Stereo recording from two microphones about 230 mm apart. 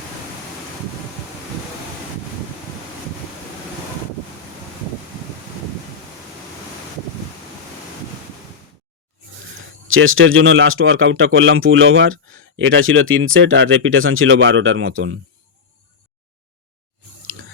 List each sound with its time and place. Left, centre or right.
9.9 s speech: right